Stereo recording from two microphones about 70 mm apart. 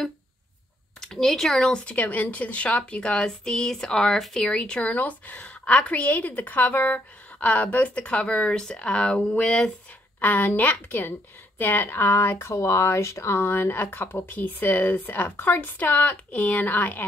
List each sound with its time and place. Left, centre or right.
1.0 s speech: centre
1.9 s speech: left
10.2 s a woman's voice: left